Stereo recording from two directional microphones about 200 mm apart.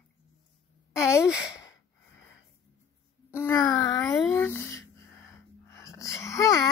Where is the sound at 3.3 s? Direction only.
10° left (ahead or behind).